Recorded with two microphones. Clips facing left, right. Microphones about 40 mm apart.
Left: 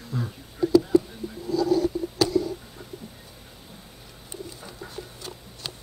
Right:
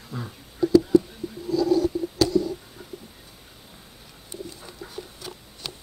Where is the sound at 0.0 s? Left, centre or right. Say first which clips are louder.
Left 3 dB; centre.